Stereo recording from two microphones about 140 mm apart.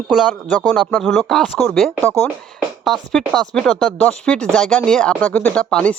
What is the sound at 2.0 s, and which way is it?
Speech, 15° left (ahead or behind).